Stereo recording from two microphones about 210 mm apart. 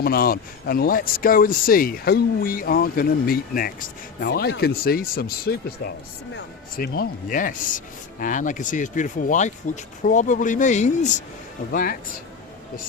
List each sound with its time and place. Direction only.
0.0 s speech: 45° left (ahead or behind)